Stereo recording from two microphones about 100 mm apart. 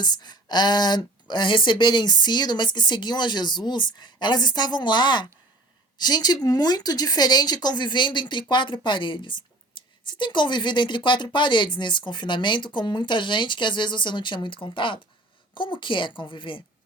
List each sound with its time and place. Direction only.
0.0 s a woman's voice: 45° left (ahead or behind)